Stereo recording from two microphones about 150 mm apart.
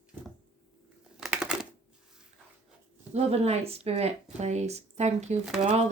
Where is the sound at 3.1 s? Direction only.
45° right (ahead or behind).